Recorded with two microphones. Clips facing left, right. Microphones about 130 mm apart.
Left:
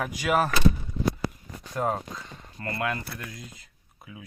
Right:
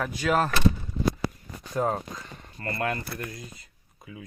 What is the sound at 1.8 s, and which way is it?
Speech, centre (ahead or behind).